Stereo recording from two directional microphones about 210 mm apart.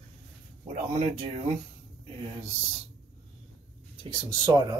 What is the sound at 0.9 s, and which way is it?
Speech, 30° right (ahead or behind).